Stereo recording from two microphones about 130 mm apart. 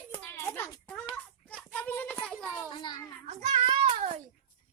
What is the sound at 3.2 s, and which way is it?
Child singing, 55° right (ahead or behind).